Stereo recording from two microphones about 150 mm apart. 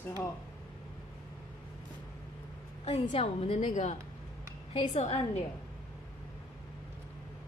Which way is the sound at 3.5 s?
55° left (ahead or behind).